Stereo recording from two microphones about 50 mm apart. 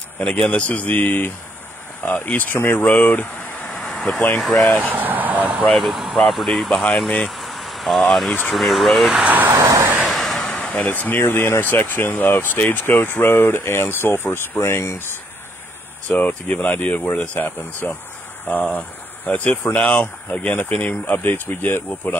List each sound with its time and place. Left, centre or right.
0.2 s speech: left
3.9 s vehicle: centre
4.4 s speech: centre
4.9 s vehicle: right
5.7 s speech: centre
9.1 s speech: right
9.5 s vehicle: right
10.0 s vehicle: centre
10.5 s a sound: left
10.9 s speech: left
14.6 s speech: left
16.2 s speech: left
21.2 s speech: left